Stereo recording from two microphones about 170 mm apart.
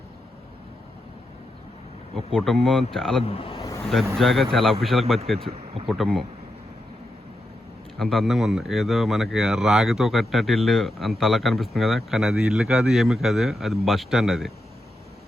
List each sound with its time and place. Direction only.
2.1 s speech: centre (ahead or behind)
3.2 s speech: 35° left (ahead or behind)
3.6 s a sound: 20° left (ahead or behind)
4.2 s speech: centre (ahead or behind)
5.5 s speech: 35° right (ahead or behind)
5.9 s speech: centre (ahead or behind)
7.9 s speech: centre (ahead or behind)